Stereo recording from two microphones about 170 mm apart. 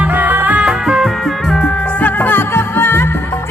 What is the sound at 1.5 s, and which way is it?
Music, 5° left (ahead or behind).